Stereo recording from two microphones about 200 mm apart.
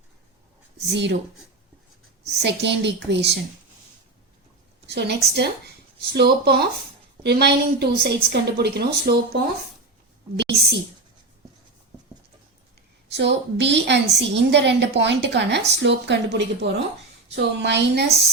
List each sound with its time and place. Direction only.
0.9 s a woman's voice: 60° right (ahead or behind)
2.2 s a woman's voice: 60° right (ahead or behind)
4.9 s a woman's voice: 60° right (ahead or behind)
13.1 s a woman's voice: 60° right (ahead or behind)